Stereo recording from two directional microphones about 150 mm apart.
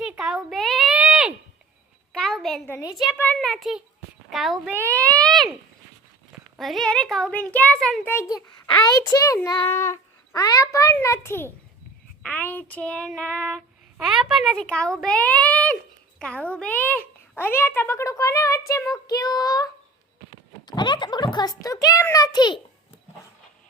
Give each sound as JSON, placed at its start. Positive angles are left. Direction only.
{"t": 0.0, "sound": "a sound", "side_deg": -5}
{"t": 2.6, "sound": "a child's voice", "side_deg": 15}
{"t": 3.3, "sound": "a child's voice", "side_deg": 0}
{"t": 4.7, "sound": "a child's voice", "side_deg": -15}
{"t": 5.0, "sound": "a child's voice", "side_deg": 5}
{"t": 6.6, "sound": "a child's voice", "side_deg": 0}
{"t": 8.4, "sound": "a child's voice", "side_deg": 25}